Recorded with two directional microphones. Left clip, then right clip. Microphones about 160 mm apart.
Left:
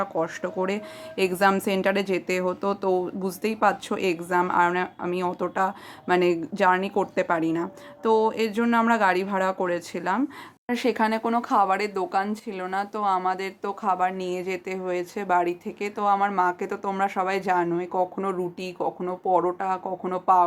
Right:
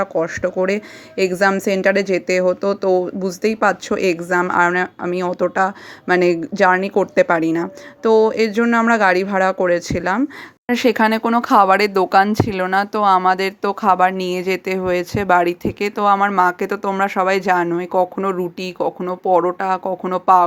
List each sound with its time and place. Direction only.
0.0 s a woman's voice: 25° right (ahead or behind); by 20.4 s 40° right (ahead or behind)